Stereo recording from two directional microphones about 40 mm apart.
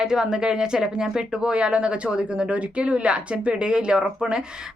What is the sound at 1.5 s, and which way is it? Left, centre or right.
Speech, right.